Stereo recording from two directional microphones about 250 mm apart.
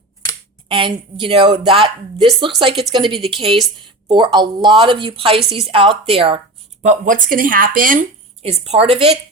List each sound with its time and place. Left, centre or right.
0.7 s a woman's voice: right